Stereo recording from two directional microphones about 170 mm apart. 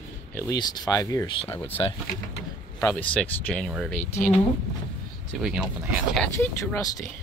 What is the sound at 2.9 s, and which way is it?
Speech, 5° left (ahead or behind).